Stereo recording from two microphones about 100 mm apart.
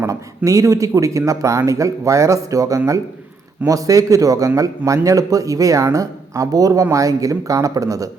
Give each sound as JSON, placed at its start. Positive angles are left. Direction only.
{"t": 0.0, "sound": "speech", "side_deg": -30}